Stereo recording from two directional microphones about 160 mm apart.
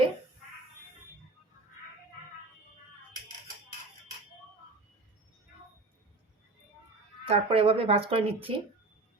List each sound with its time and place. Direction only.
7.3 s speech: 40° right (ahead or behind)